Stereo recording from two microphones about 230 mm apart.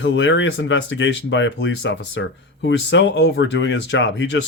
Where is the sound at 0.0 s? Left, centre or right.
Left.